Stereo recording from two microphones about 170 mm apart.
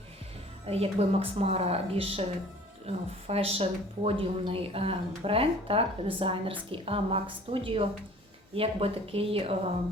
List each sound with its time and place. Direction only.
0.7 s speech: 35° right (ahead or behind)